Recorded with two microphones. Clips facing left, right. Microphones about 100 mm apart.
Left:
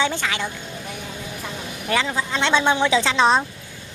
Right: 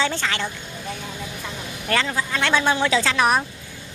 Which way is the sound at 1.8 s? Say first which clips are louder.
Left 1 dB; 15° left (ahead or behind).